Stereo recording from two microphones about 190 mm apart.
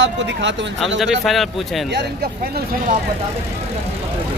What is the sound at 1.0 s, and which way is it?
Speech, centre (ahead or behind).